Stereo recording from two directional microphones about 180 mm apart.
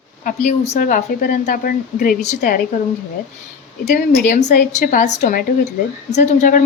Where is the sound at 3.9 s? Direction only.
45° left (ahead or behind).